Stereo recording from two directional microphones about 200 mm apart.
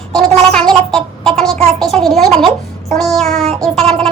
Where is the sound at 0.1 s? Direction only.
Centre (ahead or behind).